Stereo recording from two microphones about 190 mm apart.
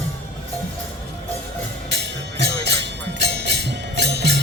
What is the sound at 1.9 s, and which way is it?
Music, 60° right (ahead or behind).